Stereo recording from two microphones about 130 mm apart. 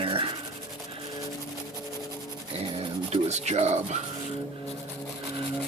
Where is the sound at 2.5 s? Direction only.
50° right (ahead or behind).